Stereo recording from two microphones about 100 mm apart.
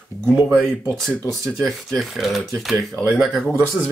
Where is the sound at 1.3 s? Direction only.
Centre (ahead or behind).